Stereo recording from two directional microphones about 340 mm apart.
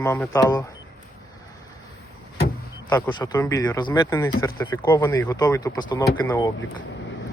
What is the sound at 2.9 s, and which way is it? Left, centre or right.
Speech, centre.